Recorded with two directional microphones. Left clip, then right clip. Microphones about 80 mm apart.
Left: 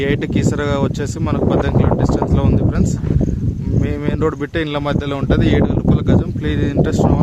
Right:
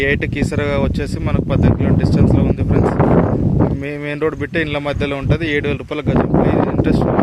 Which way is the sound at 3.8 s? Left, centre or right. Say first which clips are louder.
Even; left.